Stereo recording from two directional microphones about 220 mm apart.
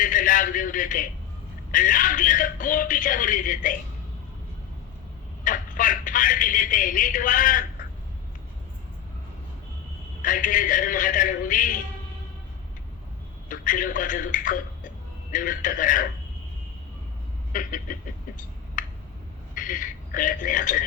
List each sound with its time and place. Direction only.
0.0 s a sound: 35° left (ahead or behind)
1.7 s speech: 35° left (ahead or behind)
5.5 s a man's voice: 35° left (ahead or behind)
10.2 s a man's voice: 35° left (ahead or behind)
13.5 s a man's voice: 40° left (ahead or behind)
17.5 s a man's voice: 40° left (ahead or behind)
18.8 s a sound: 35° left (ahead or behind)
19.5 s a man's voice: 35° left (ahead or behind)